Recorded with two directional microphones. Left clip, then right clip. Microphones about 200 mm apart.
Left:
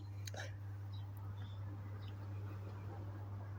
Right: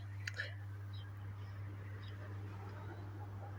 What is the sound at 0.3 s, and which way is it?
Whispering, 35° left (ahead or behind).